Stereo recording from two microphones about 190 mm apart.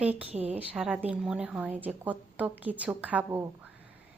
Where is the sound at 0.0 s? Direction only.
5° right (ahead or behind).